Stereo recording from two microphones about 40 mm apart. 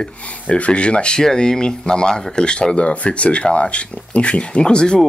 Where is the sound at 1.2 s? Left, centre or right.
Centre.